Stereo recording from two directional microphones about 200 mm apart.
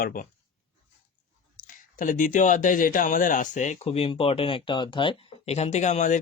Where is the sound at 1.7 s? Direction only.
40° left (ahead or behind).